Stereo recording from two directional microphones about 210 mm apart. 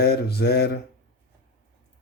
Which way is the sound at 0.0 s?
50° left (ahead or behind).